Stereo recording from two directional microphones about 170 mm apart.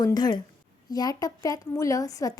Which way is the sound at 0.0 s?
25° left (ahead or behind).